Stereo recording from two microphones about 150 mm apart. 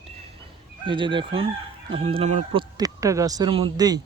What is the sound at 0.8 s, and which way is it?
Chicken, 35° right (ahead or behind).